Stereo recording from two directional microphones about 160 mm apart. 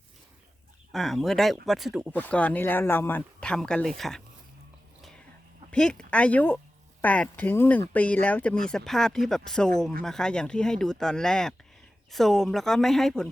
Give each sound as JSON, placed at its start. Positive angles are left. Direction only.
{"t": 0.9, "sound": "speech", "side_deg": 0}
{"t": 2.1, "sound": "speech", "side_deg": 10}
{"t": 5.7, "sound": "speech", "side_deg": 5}